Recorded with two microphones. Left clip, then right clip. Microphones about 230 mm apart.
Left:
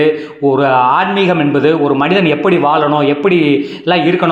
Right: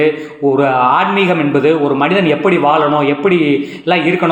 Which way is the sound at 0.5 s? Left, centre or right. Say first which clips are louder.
Left 1 dB; left.